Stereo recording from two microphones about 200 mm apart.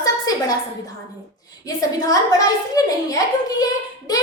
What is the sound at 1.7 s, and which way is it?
A woman's voice, 20° left (ahead or behind).